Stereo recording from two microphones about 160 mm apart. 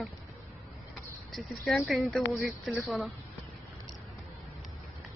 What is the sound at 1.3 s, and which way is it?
Speech, centre (ahead or behind).